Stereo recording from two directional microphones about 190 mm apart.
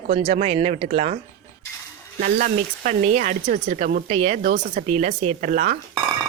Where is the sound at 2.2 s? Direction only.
45° right (ahead or behind).